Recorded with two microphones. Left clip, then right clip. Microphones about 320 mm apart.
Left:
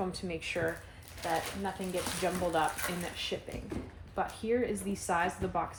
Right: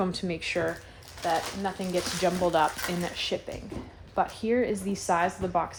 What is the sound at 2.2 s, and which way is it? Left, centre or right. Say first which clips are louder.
Speech: right 7 dB; right.